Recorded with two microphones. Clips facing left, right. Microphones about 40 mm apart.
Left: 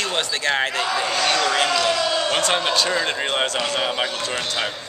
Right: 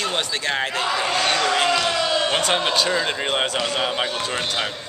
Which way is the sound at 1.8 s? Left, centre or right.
Centre.